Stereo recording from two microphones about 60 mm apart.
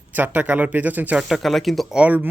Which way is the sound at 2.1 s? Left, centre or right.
Right.